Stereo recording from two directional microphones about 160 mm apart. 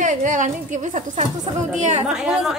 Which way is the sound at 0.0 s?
50° right (ahead or behind).